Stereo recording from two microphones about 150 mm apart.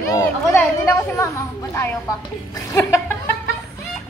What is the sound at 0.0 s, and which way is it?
Speech, 20° left (ahead or behind).